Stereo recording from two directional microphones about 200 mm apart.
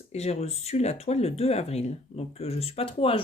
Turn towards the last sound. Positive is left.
turn(degrees=25)  # may be behind; listen again after turning